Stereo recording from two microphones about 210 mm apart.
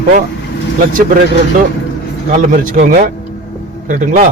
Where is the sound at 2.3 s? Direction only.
40° right (ahead or behind).